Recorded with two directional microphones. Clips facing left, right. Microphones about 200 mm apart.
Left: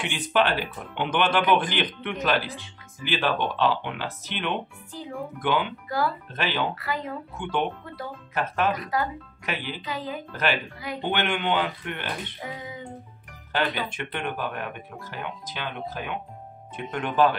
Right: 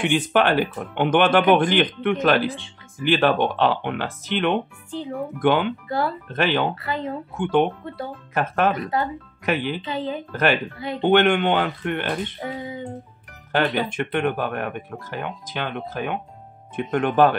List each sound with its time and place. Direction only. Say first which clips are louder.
0.0 s speech: right 5 dB; 50° right (ahead or behind)
5.9 s speech: right 2 dB; 25° right (ahead or behind)
6.3 s speech: right 11 dB; 55° right (ahead or behind)
6.7 s speech: right 4 dB; 25° right (ahead or behind)
7.3 s speech: right 8 dB; 50° right (ahead or behind)
8.8 s speech: right 3 dB; 25° right (ahead or behind)
9.5 s a woman's voice: right 9 dB; 55° right (ahead or behind)
9.8 s speech: right 5 dB; 25° right (ahead or behind)
10.3 s speech: right 6 dB; 50° right (ahead or behind)
13.5 s speech: right 6 dB; 50° right (ahead or behind)